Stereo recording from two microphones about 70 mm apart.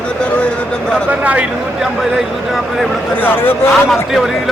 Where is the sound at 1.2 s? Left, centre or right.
Centre.